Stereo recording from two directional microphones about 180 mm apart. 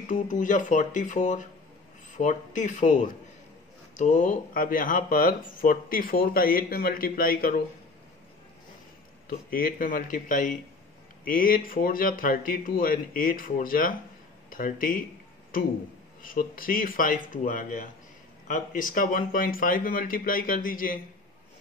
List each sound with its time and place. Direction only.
0.1 s speech: 45° left (ahead or behind)
9.3 s speech: 55° left (ahead or behind)
16.2 s speech: 50° left (ahead or behind)